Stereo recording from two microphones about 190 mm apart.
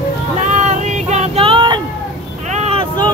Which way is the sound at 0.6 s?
40° right (ahead or behind).